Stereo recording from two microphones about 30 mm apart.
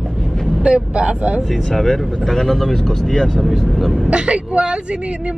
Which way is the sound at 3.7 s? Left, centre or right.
Centre.